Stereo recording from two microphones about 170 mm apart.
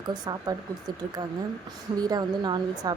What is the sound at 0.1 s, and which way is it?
Speech, 25° right (ahead or behind).